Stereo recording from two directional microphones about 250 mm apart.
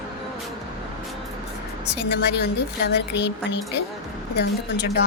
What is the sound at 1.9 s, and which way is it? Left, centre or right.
A woman's voice, left.